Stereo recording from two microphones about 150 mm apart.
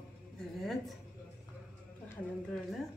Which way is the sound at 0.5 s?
Centre (ahead or behind).